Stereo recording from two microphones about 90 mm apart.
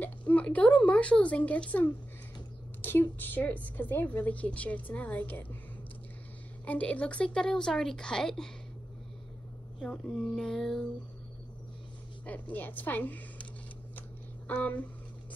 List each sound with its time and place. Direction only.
0.0 s a woman's voice: 15° left (ahead or behind)
6.6 s speech: 15° left (ahead or behind)
9.8 s a sound: 5° left (ahead or behind)
12.3 s a woman's voice: 20° left (ahead or behind)
14.5 s speech: 15° left (ahead or behind)